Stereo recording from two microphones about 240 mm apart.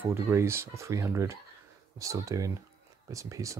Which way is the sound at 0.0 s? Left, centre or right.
Centre.